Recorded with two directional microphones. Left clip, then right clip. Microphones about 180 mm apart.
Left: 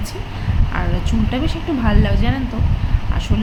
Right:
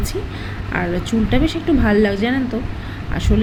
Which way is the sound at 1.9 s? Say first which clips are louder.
Right 5 dB; 20° right (ahead or behind).